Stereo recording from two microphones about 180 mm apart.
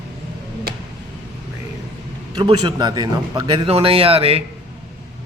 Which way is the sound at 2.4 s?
25° right (ahead or behind).